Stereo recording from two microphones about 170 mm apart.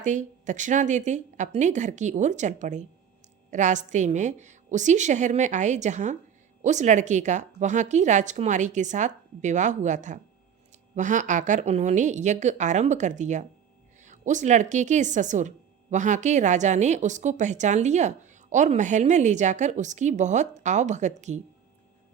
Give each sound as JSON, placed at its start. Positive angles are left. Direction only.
{"t": 0.0, "sound": "speech", "side_deg": -45}